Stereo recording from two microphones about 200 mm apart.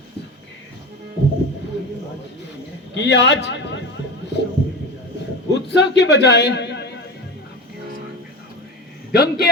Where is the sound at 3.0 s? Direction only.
60° left (ahead or behind).